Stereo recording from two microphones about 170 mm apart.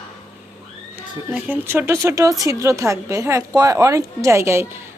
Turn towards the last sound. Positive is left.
turn(degrees=-15)  # may be behind; listen again after turning